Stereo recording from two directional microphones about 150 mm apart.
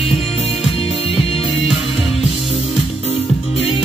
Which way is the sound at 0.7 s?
40° left (ahead or behind).